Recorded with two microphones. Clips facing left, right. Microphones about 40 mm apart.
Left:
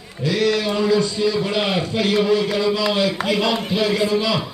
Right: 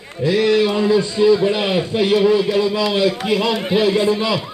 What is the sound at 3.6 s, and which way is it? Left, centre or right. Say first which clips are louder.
Speech: right 3 dB; right.